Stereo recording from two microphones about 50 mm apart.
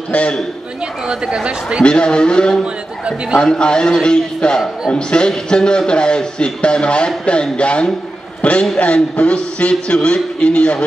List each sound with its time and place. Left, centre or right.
0.1 s a man's voice: left
1.0 s a woman's voice: centre
1.8 s a man's voice: centre
2.6 s a man's voice: centre
3.3 s a man's voice: centre